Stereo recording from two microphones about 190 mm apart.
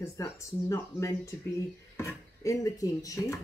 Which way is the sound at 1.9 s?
15° left (ahead or behind).